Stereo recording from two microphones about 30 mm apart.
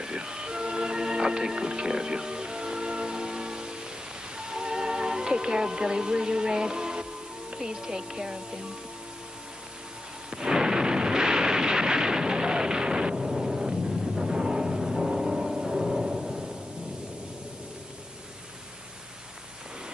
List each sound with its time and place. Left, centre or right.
0.0 s music: right
7.5 s speech: right
10.3 s artillery fire: right